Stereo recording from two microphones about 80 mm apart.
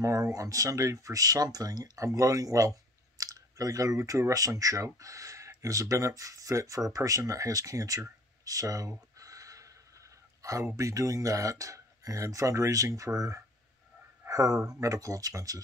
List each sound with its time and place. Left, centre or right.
0.0 s speech: right